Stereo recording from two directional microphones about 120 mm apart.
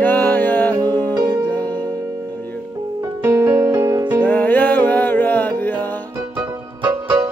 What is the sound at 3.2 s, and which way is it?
Music, 20° right (ahead or behind).